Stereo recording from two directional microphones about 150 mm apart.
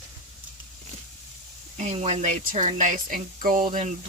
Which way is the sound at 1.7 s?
45° right (ahead or behind).